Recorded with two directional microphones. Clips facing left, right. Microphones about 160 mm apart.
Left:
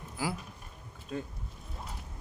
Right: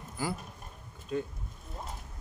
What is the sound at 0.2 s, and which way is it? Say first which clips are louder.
Speech: even; centre (ahead or behind).